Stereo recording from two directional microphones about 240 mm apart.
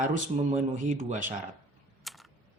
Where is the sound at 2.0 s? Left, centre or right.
Centre.